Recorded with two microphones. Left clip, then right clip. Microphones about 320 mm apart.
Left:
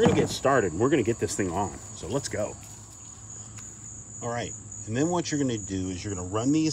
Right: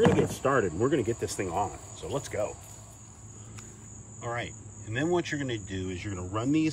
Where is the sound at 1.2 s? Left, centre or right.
Left.